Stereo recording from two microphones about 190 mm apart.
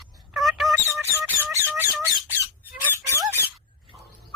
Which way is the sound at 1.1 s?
10° right (ahead or behind).